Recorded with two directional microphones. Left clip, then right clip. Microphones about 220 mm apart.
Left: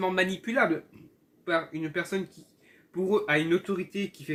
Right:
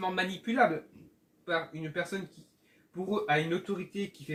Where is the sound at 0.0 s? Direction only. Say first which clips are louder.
Left 5 dB; 45° left (ahead or behind).